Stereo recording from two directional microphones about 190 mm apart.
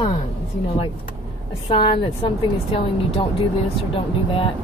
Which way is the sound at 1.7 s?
25° left (ahead or behind).